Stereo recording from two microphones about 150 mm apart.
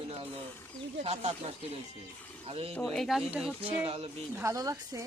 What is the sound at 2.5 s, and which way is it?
Speech, 40° right (ahead or behind).